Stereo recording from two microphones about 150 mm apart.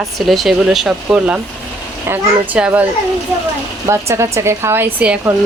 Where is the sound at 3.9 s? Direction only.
20° right (ahead or behind).